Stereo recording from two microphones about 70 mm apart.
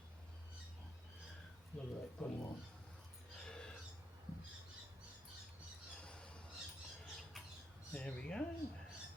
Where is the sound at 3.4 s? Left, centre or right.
Centre.